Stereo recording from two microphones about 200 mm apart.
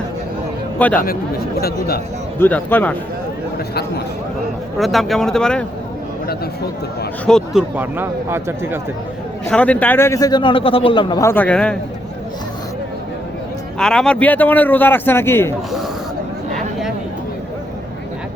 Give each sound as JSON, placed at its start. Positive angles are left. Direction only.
{"t": 0.9, "sound": "speech", "side_deg": 50}
{"t": 2.4, "sound": "a man's voice", "side_deg": 10}
{"t": 4.8, "sound": "speech", "side_deg": 0}
{"t": 7.3, "sound": "speech", "side_deg": 0}
{"t": 7.8, "sound": "speech", "side_deg": -10}
{"t": 9.5, "sound": "a man's voice", "side_deg": 5}
{"t": 13.7, "sound": "a man's voice", "side_deg": 5}